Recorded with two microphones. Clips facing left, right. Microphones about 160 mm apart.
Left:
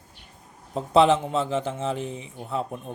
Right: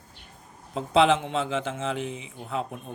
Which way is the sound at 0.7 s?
40° left (ahead or behind).